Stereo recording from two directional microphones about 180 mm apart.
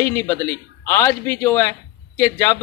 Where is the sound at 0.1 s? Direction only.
15° left (ahead or behind).